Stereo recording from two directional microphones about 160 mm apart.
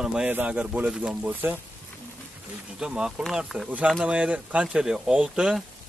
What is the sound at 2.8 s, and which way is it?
Speech, 5° right (ahead or behind).